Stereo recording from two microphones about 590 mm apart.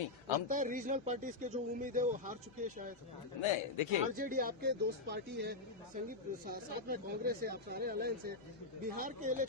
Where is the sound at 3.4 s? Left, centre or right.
Left.